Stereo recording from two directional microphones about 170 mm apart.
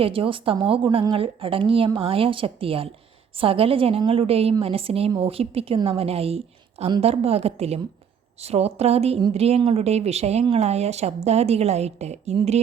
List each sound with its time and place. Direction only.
0.0 s speech: 30° right (ahead or behind)